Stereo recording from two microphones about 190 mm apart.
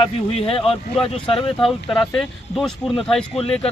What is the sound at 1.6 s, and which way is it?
Speech, centre (ahead or behind).